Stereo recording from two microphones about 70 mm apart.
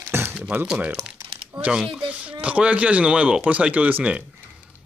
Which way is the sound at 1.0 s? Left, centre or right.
Centre.